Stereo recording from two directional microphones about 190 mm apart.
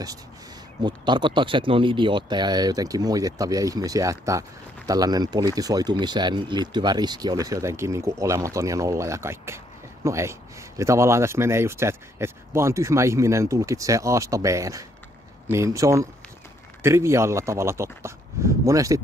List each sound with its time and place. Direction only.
0.8 s speech: 25° right (ahead or behind)